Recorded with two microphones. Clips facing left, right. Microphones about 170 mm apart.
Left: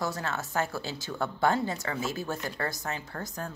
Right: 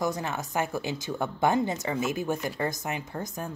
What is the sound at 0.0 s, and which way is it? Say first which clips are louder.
Speech: right 3 dB; 15° right (ahead or behind).